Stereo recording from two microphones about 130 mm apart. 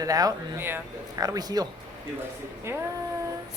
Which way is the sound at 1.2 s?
30° right (ahead or behind).